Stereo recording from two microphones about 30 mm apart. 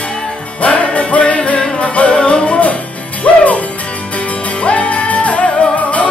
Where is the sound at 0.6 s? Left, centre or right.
Left.